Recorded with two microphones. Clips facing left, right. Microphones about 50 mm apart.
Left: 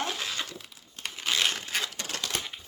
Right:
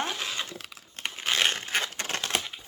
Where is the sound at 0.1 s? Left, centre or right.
Centre.